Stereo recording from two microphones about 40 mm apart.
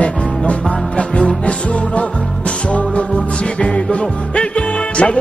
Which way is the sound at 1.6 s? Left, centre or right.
Left.